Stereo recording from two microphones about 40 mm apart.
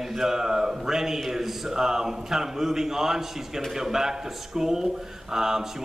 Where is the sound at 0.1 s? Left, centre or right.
Centre.